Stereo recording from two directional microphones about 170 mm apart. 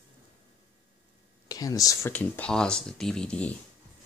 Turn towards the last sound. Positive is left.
turn(degrees=5)  # may be behind; listen again after turning